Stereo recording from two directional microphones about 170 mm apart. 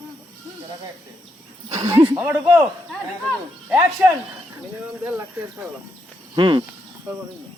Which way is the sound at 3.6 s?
10° right (ahead or behind).